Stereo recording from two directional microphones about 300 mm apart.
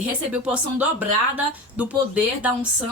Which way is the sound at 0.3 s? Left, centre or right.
Centre.